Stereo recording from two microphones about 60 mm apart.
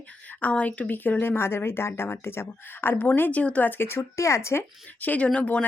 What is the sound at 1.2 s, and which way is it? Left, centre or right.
Speech, left.